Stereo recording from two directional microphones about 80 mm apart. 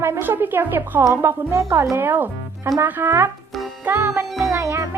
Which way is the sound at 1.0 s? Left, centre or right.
Right.